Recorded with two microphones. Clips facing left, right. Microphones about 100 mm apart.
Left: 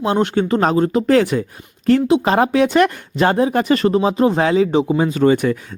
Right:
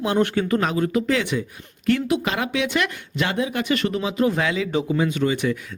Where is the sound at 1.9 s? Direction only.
30° left (ahead or behind); by 5.5 s 45° left (ahead or behind).